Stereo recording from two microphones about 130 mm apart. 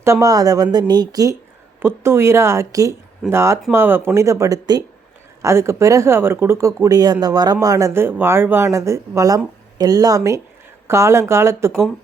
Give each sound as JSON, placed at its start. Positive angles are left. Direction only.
{"t": 0.0, "sound": "speech", "side_deg": -25}